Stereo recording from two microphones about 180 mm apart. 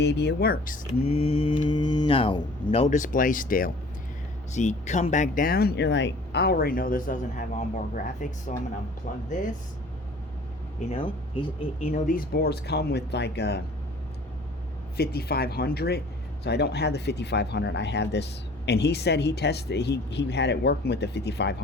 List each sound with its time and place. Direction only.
0.0 s speech: 70° left (ahead or behind); by 0.8 s 50° left (ahead or behind)
1.0 s mantra: 35° left (ahead or behind)
2.7 s speech: 40° left (ahead or behind)
10.8 s speech: 30° left (ahead or behind); by 13.6 s 65° left (ahead or behind)
14.9 s speech: 60° left (ahead or behind)